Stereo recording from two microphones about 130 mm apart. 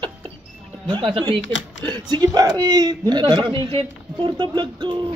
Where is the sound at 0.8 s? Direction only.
35° right (ahead or behind).